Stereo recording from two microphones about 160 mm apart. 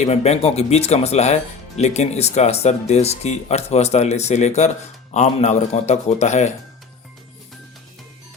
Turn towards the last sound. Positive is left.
turn(degrees=45)  # may be behind; listen again after turning